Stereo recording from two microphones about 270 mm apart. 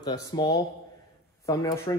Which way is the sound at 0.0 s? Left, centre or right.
Centre.